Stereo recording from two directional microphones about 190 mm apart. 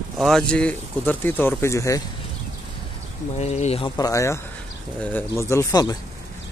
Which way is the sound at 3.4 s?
35° left (ahead or behind).